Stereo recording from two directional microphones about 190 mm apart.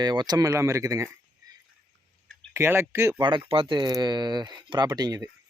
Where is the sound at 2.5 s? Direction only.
15° right (ahead or behind).